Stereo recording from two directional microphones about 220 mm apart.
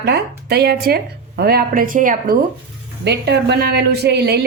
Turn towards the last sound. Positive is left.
turn(degrees=-50)  # may be behind; listen again after turning